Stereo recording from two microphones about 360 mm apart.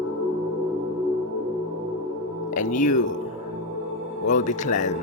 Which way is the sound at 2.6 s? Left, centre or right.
Left.